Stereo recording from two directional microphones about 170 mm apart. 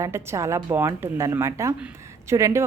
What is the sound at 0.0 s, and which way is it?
A woman's voice, 15° right (ahead or behind).